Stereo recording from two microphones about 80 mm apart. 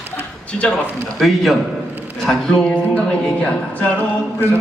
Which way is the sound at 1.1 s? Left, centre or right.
Centre.